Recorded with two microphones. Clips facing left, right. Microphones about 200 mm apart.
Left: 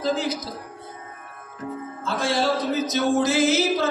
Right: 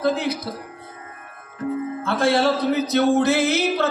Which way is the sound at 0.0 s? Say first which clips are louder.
Right 3 dB; 60° right (ahead or behind).